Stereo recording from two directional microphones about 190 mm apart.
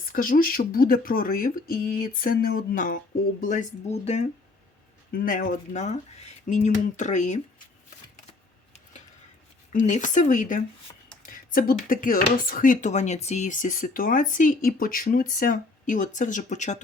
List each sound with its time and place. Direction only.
0.1 s speech: 45° left (ahead or behind)
4.0 s speech: 35° left (ahead or behind)
5.1 s speech: 45° left (ahead or behind)
9.7 s speech: 40° left (ahead or behind)